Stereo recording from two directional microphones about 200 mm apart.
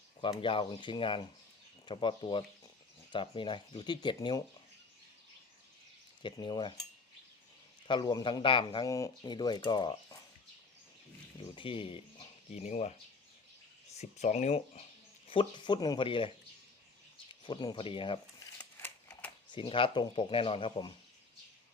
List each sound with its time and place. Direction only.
0.2 s speech: 25° left (ahead or behind)
6.2 s speech: 20° left (ahead or behind)
7.9 s speech: 20° left (ahead or behind)
11.3 s speech: 25° left (ahead or behind)
13.9 s speech: 35° left (ahead or behind)
17.4 s speech: 25° left (ahead or behind)
19.5 s speech: 25° left (ahead or behind)